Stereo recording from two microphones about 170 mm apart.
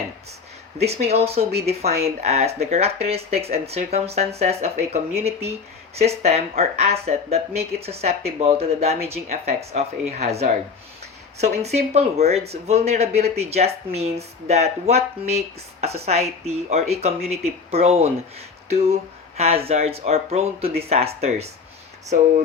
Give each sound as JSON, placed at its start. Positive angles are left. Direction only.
{"t": 0.8, "sound": "speech", "side_deg": -40}